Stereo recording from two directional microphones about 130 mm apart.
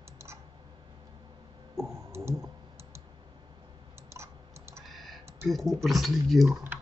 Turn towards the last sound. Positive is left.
turn(degrees=0)  # may be behind; listen again after turning